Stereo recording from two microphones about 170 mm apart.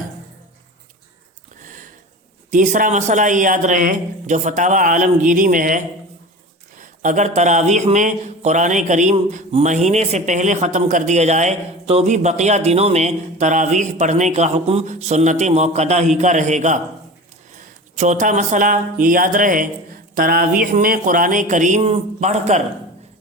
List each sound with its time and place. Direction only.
1.5 s sniff: 50° right (ahead or behind)
2.5 s speech: 50° right (ahead or behind)
17.9 s speech: 45° right (ahead or behind)